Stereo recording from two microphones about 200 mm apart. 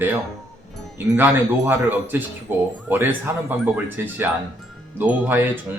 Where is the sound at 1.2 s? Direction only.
10° right (ahead or behind).